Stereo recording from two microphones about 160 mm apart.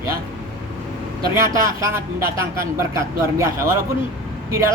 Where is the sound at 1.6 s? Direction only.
20° right (ahead or behind).